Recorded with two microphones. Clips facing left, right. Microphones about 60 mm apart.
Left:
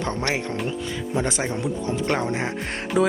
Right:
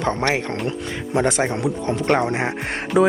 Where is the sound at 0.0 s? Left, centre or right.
Right.